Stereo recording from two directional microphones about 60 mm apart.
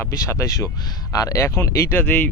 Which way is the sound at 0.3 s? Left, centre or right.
Left.